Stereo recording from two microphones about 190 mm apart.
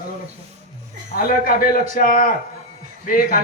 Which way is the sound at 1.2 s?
50° left (ahead or behind).